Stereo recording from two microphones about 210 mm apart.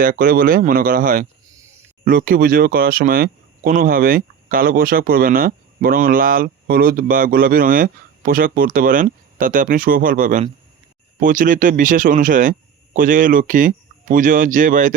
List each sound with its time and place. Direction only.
0.0 s speech: 45° right (ahead or behind)